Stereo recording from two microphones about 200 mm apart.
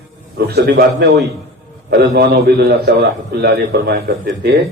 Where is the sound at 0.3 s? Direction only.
50° right (ahead or behind).